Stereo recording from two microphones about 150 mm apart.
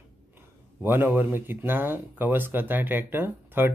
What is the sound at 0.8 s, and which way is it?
Speech, 15° right (ahead or behind).